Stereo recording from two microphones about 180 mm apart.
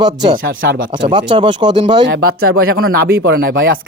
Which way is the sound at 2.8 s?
60° right (ahead or behind).